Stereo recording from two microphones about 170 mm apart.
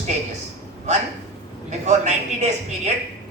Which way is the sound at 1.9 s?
45° right (ahead or behind).